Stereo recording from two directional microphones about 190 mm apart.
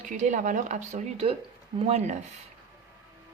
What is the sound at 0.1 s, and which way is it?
A woman's voice, 40° right (ahead or behind).